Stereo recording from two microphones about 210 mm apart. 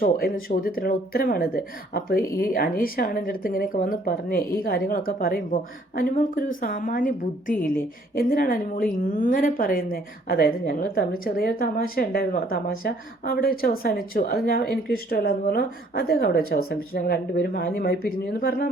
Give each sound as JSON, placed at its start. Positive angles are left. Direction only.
{"t": 0.0, "sound": "a woman's voice", "side_deg": 45}